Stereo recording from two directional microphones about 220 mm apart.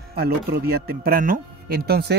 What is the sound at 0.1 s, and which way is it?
A man's voice, 45° right (ahead or behind).